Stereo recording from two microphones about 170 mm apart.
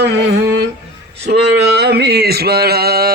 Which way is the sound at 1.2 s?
75° right (ahead or behind).